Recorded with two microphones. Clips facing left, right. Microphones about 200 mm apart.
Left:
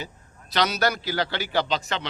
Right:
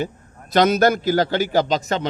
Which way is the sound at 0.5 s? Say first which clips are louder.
Right 8 dB; 50° right (ahead or behind).